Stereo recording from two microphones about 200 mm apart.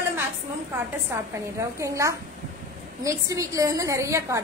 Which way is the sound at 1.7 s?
15° right (ahead or behind).